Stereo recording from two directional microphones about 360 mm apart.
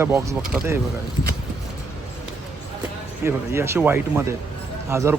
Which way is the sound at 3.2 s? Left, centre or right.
Centre.